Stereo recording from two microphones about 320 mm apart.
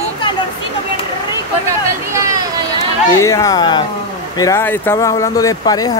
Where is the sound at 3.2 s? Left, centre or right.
Centre.